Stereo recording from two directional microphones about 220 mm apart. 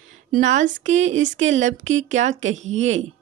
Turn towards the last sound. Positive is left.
turn(degrees=-30)  # may be behind; listen again after turning